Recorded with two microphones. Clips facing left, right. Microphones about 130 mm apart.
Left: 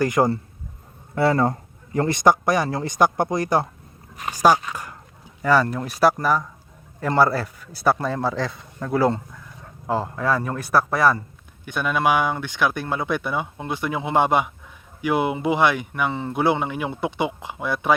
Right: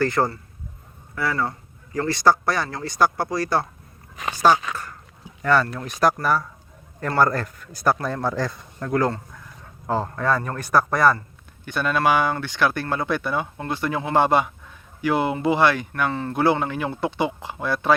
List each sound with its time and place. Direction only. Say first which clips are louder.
0.0 s speech: left 2 dB; 15° left (ahead or behind)
1.1 s speech: left 6 dB; 30° left (ahead or behind); by 4.6 s 10° left (ahead or behind)
4.7 s a sound: right 1 dB; 15° left (ahead or behind)
5.4 s speech: left 1 dB; 5° left (ahead or behind)
7.2 s speech: left 1 dB; 5° left (ahead or behind)